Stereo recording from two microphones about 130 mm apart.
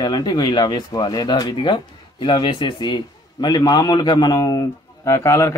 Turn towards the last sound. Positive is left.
turn(degrees=20)  # may be behind; listen again after turning